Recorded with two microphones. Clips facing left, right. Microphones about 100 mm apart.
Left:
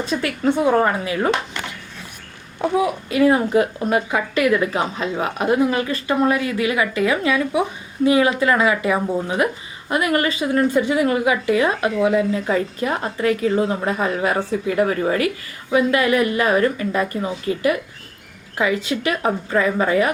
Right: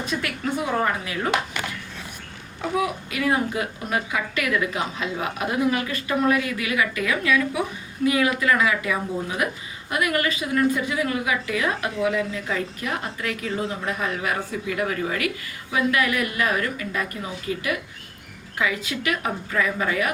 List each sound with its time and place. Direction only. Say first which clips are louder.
0.0 s a woman's voice: left 7 dB; 30° left (ahead or behind)
2.6 s a woman's voice: left 5 dB; 30° left (ahead or behind)
18.5 s a woman's voice: left 5 dB; 30° left (ahead or behind)